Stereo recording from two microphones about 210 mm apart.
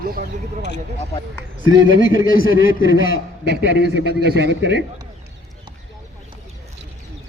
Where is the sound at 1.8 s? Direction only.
65° right (ahead or behind).